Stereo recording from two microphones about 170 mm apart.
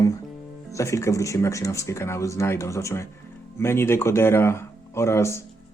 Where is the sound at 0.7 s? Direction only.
15° left (ahead or behind).